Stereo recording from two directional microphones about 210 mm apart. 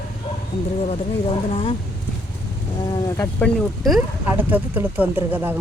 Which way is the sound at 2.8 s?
20° left (ahead or behind).